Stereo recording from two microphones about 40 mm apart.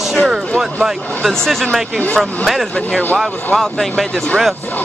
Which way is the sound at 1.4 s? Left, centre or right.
Centre.